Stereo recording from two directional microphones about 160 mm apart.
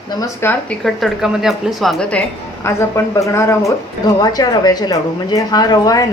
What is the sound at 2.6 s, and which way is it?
Speech, 15° left (ahead or behind).